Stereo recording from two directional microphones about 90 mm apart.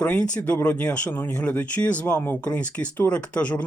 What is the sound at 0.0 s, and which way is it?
Speech, 15° left (ahead or behind).